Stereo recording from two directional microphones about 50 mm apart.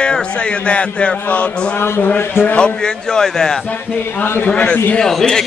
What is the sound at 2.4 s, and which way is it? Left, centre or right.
A man's voice, left.